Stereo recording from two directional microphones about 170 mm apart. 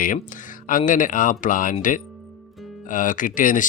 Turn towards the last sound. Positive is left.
turn(degrees=50)  # may be behind; listen again after turning